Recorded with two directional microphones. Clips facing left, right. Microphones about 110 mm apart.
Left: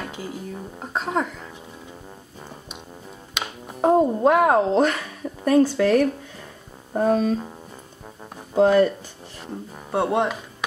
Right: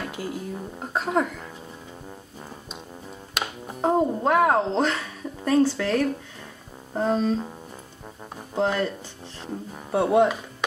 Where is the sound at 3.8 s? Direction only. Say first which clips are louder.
Left 5 dB; 10° left (ahead or behind).